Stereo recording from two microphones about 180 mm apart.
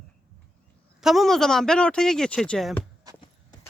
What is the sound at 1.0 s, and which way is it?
Speech, centre (ahead or behind).